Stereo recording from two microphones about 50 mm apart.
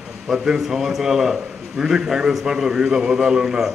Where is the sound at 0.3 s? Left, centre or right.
Centre.